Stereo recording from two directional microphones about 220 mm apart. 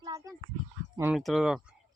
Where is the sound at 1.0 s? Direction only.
5° right (ahead or behind).